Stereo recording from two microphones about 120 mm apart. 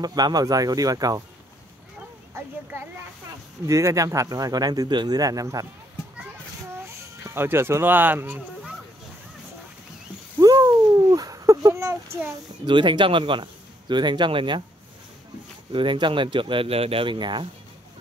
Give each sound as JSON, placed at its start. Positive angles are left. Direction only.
{"t": 0.0, "sound": "speech", "side_deg": -35}
{"t": 2.4, "sound": "a sound", "side_deg": -25}
{"t": 3.6, "sound": "speech", "side_deg": -25}
{"t": 6.8, "sound": "speech", "side_deg": -20}
{"t": 10.4, "sound": "a sound", "side_deg": -30}
{"t": 12.6, "sound": "speech", "side_deg": -40}
{"t": 15.7, "sound": "speech", "side_deg": -45}